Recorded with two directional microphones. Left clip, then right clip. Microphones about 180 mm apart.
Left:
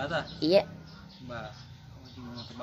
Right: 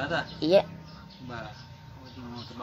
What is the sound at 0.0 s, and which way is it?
Speech, 10° left (ahead or behind).